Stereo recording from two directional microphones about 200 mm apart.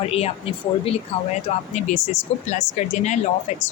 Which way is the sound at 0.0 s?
30° left (ahead or behind).